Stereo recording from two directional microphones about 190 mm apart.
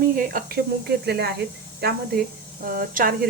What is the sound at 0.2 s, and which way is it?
Speech, 50° right (ahead or behind).